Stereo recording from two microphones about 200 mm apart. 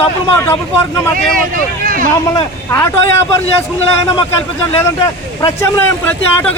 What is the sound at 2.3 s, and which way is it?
Speech, 15° left (ahead or behind).